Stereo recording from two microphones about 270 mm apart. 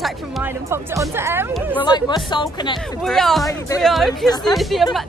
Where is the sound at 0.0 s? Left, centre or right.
Centre.